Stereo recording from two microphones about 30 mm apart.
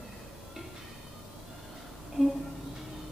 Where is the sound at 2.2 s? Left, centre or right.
Centre.